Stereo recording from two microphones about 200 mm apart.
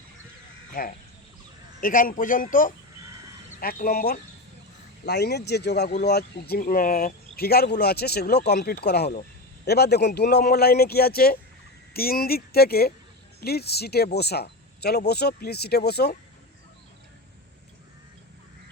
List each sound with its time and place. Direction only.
0.7 s speech: 45° left (ahead or behind)